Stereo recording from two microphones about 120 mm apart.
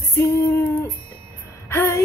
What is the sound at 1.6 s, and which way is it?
Speech, 20° left (ahead or behind).